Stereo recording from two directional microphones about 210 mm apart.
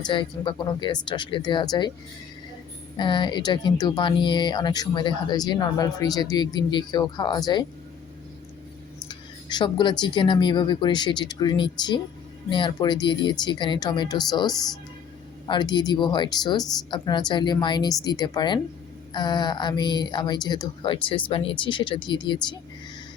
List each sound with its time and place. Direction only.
0.0 s speech: 25° left (ahead or behind)
3.0 s speech: 20° left (ahead or behind)
9.0 s speech: 20° left (ahead or behind)